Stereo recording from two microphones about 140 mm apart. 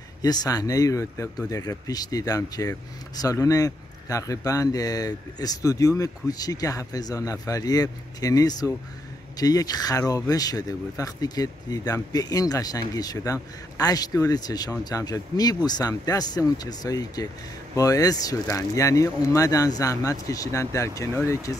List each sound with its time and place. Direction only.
0.2 s speech: 30° left (ahead or behind)